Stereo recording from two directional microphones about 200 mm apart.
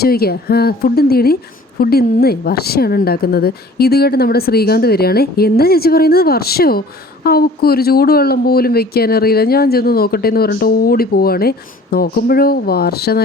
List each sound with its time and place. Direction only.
0.0 s speech: 50° left (ahead or behind)